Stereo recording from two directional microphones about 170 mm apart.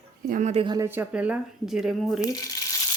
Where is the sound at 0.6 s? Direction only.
25° right (ahead or behind).